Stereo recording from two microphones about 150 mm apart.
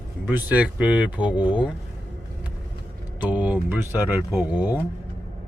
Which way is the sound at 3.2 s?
10° right (ahead or behind).